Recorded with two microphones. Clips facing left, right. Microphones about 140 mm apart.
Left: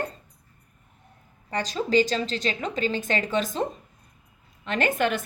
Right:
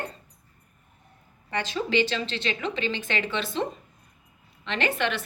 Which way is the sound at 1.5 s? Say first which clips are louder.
Left 2 dB; 40° left (ahead or behind).